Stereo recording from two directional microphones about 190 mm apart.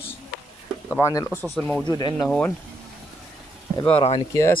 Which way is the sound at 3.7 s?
30° left (ahead or behind).